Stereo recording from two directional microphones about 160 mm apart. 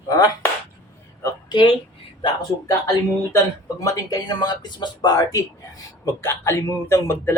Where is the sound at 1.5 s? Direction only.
30° left (ahead or behind).